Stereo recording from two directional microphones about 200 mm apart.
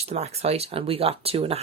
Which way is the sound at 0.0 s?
30° right (ahead or behind).